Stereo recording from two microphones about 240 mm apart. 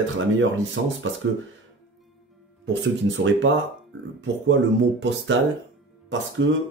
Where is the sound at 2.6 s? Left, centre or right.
Right.